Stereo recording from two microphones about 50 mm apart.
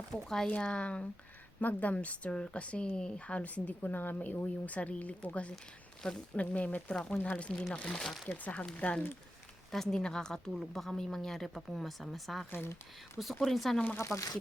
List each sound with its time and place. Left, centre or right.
0.1 s a woman's voice: centre; by 6.8 s left
6.8 s a woman's voice: centre
9.7 s a woman's voice: centre
10.5 s speech: centre
10.8 s speech: centre
12.5 s speech: left
13.4 s speech: centre
13.9 s speech: left